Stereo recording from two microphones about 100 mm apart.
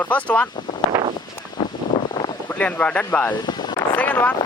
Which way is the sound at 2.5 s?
15° left (ahead or behind).